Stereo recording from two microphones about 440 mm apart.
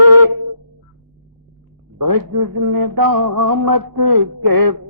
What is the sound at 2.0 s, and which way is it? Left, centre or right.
A man's voice, right.